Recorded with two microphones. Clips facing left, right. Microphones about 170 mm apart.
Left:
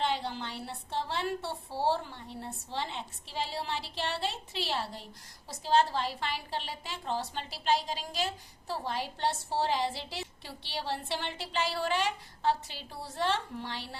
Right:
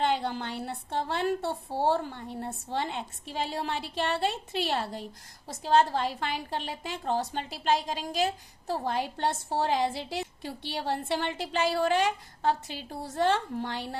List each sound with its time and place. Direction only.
0.0 s a woman's voice: 55° right (ahead or behind)